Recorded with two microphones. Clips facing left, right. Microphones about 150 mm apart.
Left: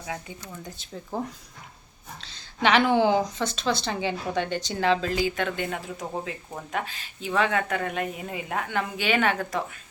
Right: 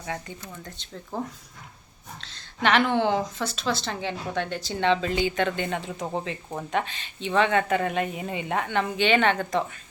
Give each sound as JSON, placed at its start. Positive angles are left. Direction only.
{"t": 0.0, "sound": "a woman's voice", "side_deg": 5}
{"t": 2.2, "sound": "a woman's voice", "side_deg": 0}